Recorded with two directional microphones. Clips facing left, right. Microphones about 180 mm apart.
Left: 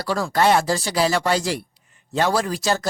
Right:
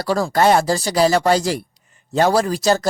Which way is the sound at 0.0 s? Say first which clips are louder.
Right 3 dB; 40° right (ahead or behind).